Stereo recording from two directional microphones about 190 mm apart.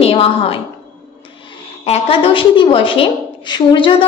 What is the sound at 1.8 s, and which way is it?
A woman's voice, 30° left (ahead or behind).